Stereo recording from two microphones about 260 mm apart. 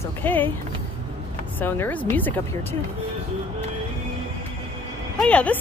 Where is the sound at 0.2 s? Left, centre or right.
Centre.